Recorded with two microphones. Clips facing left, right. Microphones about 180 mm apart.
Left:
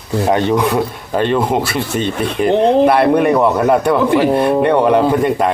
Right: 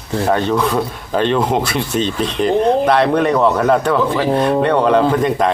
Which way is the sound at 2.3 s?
10° left (ahead or behind).